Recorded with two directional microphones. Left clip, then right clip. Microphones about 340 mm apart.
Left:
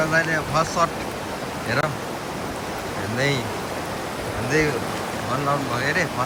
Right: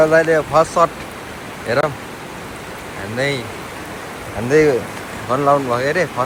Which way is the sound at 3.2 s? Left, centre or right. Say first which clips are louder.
Right 4 dB; centre.